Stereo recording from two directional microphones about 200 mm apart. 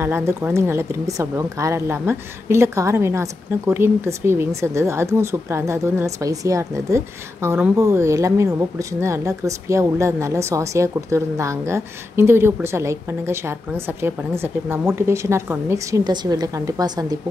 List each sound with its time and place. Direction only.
0.0 s a woman's voice: 15° right (ahead or behind)